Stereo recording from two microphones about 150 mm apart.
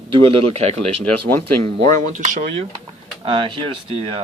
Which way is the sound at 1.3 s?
15° left (ahead or behind).